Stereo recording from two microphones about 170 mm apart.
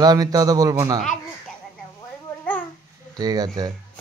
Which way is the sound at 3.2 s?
20° right (ahead or behind).